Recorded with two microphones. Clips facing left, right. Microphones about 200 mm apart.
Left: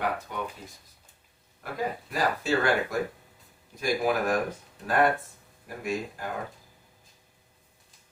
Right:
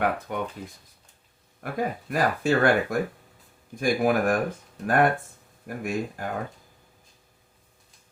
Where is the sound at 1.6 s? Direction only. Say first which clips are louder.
Right 3 dB; 55° right (ahead or behind).